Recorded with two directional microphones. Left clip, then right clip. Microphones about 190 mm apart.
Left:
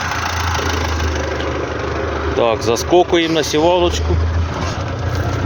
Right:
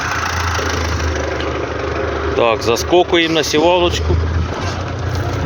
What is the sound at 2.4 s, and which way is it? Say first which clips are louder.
Speech: right 1 dB; 15° left (ahead or behind).